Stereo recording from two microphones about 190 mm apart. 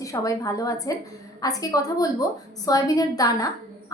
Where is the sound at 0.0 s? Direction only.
15° left (ahead or behind).